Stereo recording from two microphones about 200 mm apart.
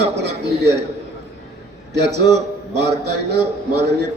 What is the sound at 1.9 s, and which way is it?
A man's voice, 60° right (ahead or behind).